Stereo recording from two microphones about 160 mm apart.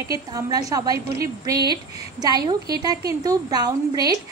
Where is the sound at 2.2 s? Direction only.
25° right (ahead or behind).